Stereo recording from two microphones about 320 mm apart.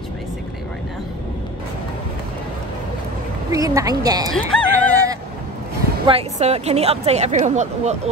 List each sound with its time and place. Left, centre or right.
3.5 s a woman's voice: centre
4.3 s speech: centre
4.7 s honk: centre
6.0 s speech: centre